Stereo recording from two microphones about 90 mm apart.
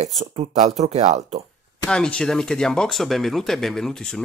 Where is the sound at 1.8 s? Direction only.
10° left (ahead or behind).